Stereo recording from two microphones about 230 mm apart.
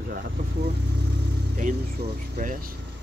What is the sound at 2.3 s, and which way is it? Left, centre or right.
Speech, right.